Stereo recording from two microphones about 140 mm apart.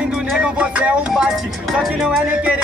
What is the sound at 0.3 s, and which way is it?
Speech, 5° right (ahead or behind).